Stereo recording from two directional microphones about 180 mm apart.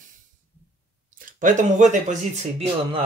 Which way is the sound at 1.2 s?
45° right (ahead or behind).